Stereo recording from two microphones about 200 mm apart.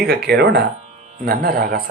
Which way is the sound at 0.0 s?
55° right (ahead or behind).